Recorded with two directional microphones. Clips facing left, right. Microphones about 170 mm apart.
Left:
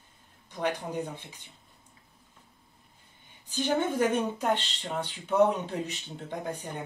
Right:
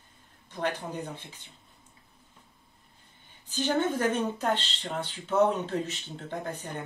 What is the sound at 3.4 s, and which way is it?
Speech, 10° left (ahead or behind).